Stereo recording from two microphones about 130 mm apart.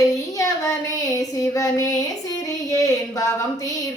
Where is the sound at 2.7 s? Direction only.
25° left (ahead or behind).